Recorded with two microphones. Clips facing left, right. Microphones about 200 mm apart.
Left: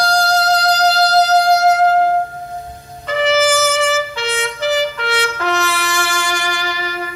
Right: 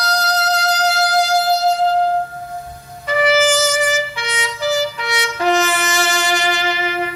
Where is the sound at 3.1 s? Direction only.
10° right (ahead or behind).